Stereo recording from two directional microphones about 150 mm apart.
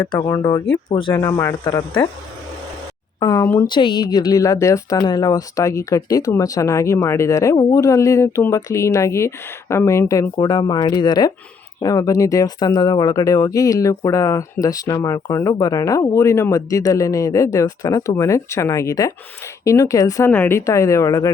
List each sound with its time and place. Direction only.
0.1 s speech: 30° left (ahead or behind)
1.1 s a woman's voice: 25° left (ahead or behind)
3.2 s speech: 20° left (ahead or behind)
3.7 s a woman's voice: 30° left (ahead or behind)